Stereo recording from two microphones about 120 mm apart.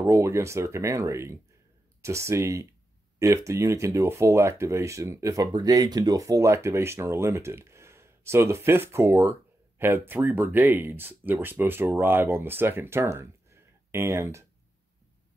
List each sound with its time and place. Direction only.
0.0 s speech: 25° right (ahead or behind)